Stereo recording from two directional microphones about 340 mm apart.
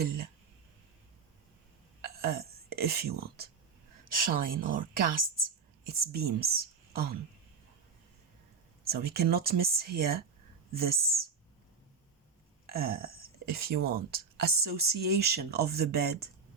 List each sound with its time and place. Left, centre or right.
2.0 s a sound: right
2.6 s speech: right
8.9 s speech: right
12.6 s speech: right